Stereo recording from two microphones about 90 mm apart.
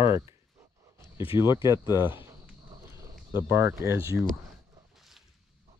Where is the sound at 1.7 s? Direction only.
55° left (ahead or behind).